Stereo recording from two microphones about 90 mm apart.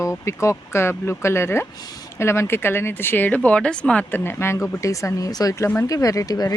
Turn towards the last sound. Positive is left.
turn(degrees=45)  # may be behind; listen again after turning